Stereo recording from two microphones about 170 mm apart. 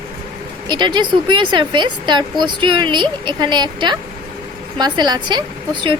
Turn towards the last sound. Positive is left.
turn(degrees=-30)  # may be behind; listen again after turning